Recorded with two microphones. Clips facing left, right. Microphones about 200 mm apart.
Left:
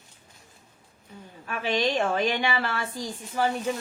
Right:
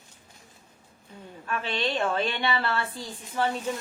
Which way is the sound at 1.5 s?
10° left (ahead or behind).